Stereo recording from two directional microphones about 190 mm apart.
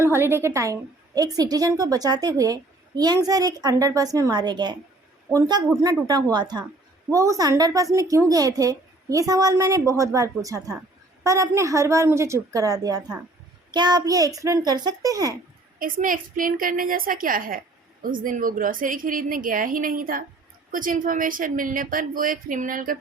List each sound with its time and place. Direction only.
0.0 s a woman's voice: 10° right (ahead or behind)
15.8 s a woman's voice: 45° right (ahead or behind)